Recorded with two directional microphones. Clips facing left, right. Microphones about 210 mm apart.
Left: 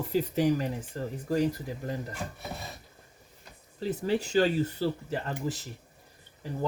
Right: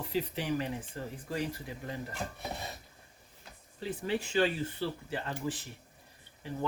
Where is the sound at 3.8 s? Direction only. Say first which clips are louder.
Left 5 dB; 40° left (ahead or behind).